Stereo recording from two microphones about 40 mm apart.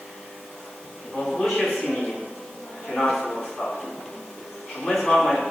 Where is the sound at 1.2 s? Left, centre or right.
Centre.